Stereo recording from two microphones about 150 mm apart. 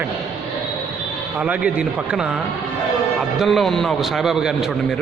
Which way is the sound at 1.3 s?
10° right (ahead or behind).